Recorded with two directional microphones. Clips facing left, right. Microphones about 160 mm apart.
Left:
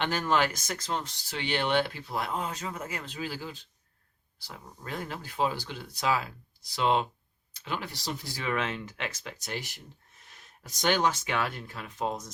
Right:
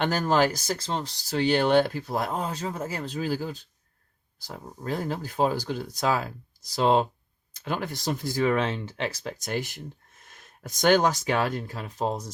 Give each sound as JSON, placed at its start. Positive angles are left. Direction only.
{"t": 0.0, "sound": "speech", "side_deg": -40}